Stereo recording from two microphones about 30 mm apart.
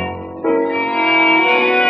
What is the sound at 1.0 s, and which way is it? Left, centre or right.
Music, left.